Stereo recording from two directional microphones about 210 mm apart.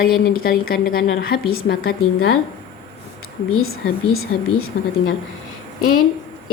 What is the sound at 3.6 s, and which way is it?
Speech, 80° left.